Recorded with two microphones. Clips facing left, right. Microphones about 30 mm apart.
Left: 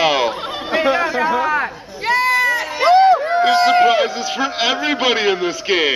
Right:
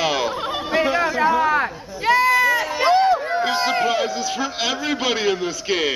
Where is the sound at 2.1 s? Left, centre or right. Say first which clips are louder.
Left 1 dB; left.